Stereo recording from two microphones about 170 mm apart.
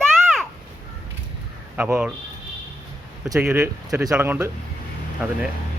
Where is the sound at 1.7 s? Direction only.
10° right (ahead or behind).